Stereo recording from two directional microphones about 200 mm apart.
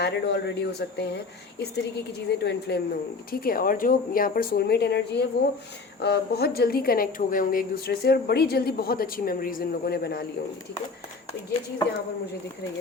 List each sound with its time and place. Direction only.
0.0 s speech: 55° left (ahead or behind)